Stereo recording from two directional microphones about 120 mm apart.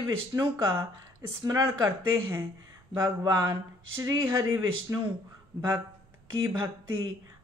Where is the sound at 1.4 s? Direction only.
30° right (ahead or behind).